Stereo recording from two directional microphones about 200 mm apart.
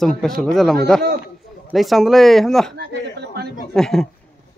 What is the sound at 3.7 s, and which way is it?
Speech, centre (ahead or behind).